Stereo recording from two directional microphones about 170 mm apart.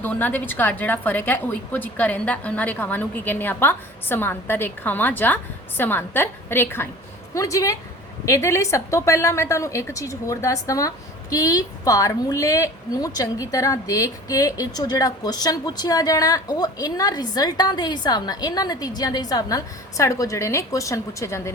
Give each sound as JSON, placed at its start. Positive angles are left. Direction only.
{"t": 0.0, "sound": "a woman's voice", "side_deg": 10}